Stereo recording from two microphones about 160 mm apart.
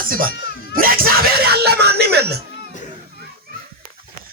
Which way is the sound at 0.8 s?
65° right (ahead or behind).